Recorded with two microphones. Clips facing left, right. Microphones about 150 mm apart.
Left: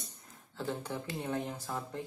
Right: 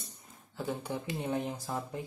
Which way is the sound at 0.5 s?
15° right (ahead or behind).